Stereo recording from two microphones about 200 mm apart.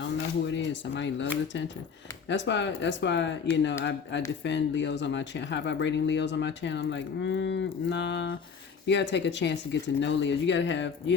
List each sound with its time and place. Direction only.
0.0 s speech: 65° left (ahead or behind)
4.4 s speech: 60° left (ahead or behind)